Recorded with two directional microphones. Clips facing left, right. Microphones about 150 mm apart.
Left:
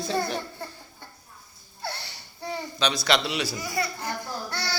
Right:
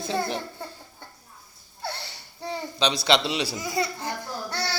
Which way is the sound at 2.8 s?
25° right (ahead or behind).